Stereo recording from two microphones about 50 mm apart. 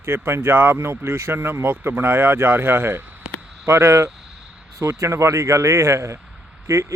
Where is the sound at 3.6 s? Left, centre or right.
Right.